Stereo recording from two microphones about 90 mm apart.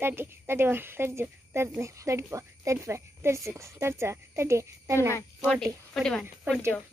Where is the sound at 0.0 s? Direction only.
25° right (ahead or behind).